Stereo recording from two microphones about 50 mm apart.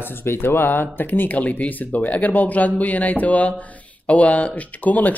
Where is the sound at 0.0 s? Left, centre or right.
Left.